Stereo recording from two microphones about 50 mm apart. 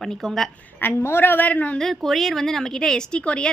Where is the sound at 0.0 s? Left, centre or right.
Centre.